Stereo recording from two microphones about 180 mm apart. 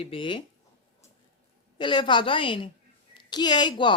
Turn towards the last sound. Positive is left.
turn(degrees=25)  # may be behind; listen again after turning